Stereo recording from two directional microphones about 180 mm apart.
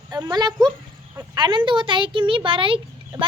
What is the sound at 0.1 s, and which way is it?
A woman's voice, 20° right (ahead or behind).